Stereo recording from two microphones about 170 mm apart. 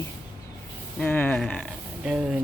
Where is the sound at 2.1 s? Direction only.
5° right (ahead or behind).